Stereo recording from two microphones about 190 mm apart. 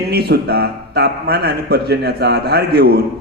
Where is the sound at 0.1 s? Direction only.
55° right (ahead or behind).